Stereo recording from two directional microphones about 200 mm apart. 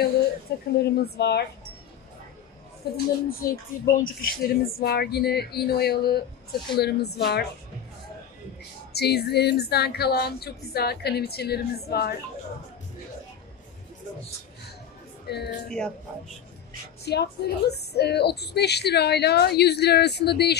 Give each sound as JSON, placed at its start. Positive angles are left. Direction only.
{"t": 0.7, "sound": "a woman's voice", "side_deg": 55}
{"t": 2.8, "sound": "speech", "side_deg": 55}
{"t": 8.9, "sound": "speech", "side_deg": 55}
{"t": 15.2, "sound": "a woman's voice", "side_deg": 55}
{"t": 17.0, "sound": "a woman's voice", "side_deg": 55}